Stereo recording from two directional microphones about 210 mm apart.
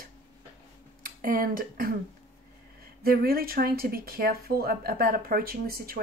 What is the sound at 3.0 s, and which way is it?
A woman's voice, 45° right (ahead or behind).